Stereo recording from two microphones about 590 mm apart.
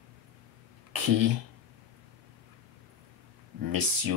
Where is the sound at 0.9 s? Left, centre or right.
Right.